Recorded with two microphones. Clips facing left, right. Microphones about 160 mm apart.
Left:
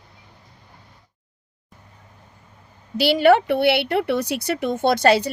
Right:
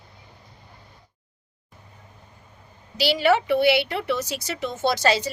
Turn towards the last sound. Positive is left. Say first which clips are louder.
# left 5 dB
turn(degrees=55)  # may be behind; listen again after turning